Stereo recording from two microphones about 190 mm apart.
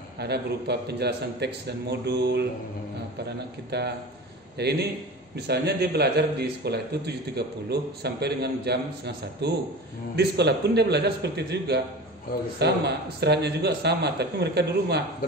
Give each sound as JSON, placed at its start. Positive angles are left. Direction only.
{"t": 0.2, "sound": "a man's voice", "side_deg": -60}
{"t": 3.7, "sound": "a man's voice", "side_deg": -60}